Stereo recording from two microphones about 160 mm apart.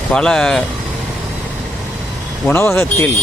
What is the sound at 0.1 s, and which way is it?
Speech, 5° left (ahead or behind).